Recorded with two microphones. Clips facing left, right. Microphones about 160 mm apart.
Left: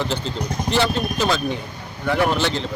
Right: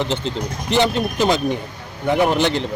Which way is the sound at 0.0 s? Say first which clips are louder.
Right 2 dB; 20° right (ahead or behind).